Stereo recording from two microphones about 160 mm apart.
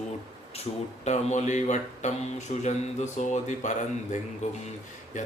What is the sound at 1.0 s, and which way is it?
Speech, 45° left (ahead or behind).